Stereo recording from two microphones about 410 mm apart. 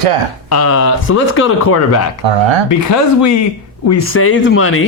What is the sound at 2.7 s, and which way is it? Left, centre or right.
A man's voice, left.